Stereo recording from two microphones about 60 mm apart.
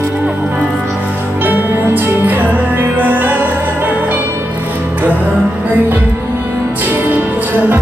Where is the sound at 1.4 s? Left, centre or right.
Right.